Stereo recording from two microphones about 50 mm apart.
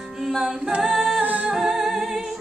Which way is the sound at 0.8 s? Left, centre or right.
Centre.